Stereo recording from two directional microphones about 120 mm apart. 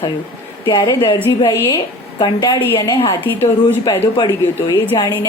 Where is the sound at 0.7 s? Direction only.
35° left (ahead or behind).